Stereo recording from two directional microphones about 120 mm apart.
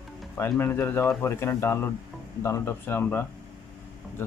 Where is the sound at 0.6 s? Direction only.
20° left (ahead or behind).